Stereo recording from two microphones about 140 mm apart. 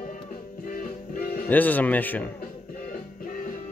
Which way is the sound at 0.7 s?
85° left.